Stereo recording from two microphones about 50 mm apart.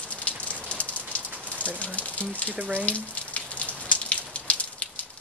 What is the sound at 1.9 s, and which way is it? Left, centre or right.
Speech, left.